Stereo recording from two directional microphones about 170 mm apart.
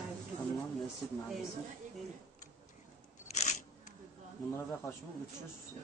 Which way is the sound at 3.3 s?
40° left (ahead or behind).